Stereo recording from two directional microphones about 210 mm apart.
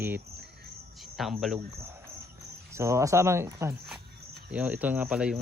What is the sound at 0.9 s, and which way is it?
Cricket, centre (ahead or behind).